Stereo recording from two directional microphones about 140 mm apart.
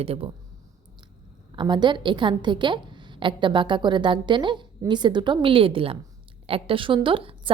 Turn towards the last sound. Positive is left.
turn(degrees=-40)  # may be behind; listen again after turning